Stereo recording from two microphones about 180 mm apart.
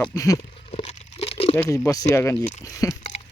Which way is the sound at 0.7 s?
35° left (ahead or behind).